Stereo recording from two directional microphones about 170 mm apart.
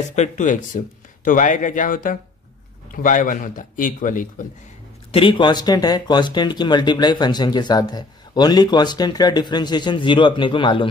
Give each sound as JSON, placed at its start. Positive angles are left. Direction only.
{"t": 0.1, "sound": "speech", "side_deg": 45}
{"t": 5.1, "sound": "speech", "side_deg": 30}